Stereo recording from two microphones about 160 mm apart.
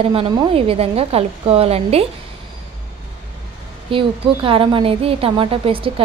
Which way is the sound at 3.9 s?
35° right (ahead or behind).